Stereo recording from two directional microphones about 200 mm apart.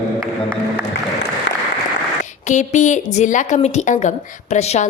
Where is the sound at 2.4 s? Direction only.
35° left (ahead or behind).